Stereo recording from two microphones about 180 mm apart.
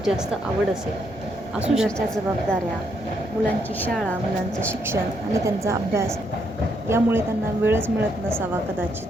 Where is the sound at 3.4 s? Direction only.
10° left (ahead or behind).